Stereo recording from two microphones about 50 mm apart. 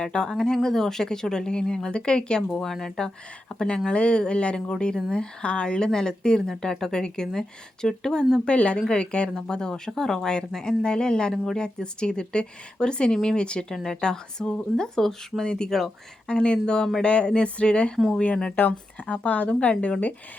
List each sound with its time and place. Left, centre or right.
0.0 s speech: centre
2.5 s speech: centre; by 20.0 s left